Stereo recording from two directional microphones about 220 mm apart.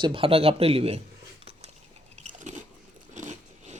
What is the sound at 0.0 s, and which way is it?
Speech, 25° right (ahead or behind).